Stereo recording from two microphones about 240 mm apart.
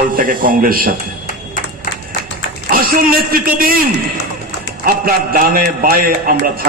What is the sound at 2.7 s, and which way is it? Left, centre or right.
A man's voice, right.